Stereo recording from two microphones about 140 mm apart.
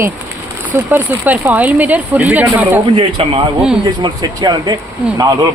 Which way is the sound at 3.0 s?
40° right (ahead or behind).